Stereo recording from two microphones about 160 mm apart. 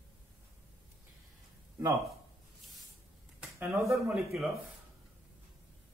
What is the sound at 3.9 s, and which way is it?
Speech, centre (ahead or behind).